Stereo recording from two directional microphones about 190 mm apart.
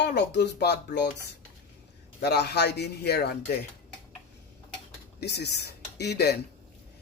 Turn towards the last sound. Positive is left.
turn(degrees=60)  # may be behind; listen again after turning